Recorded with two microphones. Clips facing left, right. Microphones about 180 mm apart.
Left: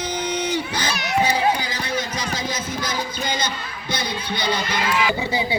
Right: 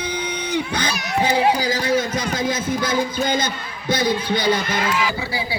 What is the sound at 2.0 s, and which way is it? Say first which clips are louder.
A man's voice: right 4 dB; 50° right (ahead or behind).